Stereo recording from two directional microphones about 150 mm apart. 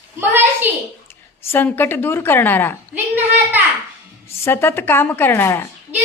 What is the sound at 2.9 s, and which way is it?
Speech, 10° right (ahead or behind).